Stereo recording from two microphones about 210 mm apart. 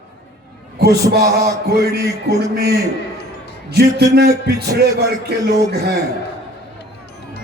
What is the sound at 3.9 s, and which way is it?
Speech, 50° right (ahead or behind).